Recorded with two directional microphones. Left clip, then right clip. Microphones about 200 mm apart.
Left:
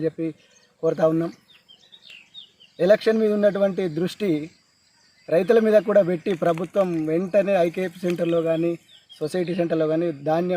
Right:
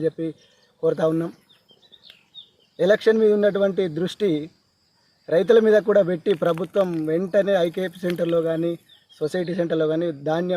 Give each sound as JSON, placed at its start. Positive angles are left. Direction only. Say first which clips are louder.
{"t": 0.0, "sound": "speech", "louder": "right 1 dB", "side_deg": -25}
{"t": 2.7, "sound": "speech", "louder": "even", "side_deg": -25}